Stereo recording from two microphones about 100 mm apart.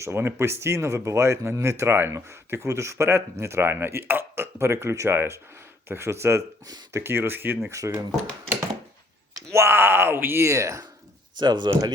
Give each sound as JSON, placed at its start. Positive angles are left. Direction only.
{"t": 0.0, "sound": "speech", "side_deg": -25}
{"t": 9.3, "sound": "speech", "side_deg": -30}
{"t": 11.3, "sound": "speech", "side_deg": -50}